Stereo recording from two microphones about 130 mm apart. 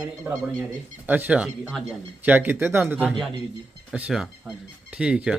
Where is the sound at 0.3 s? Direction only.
15° right (ahead or behind).